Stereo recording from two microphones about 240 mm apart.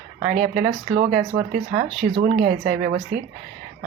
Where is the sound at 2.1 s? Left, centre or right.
Right.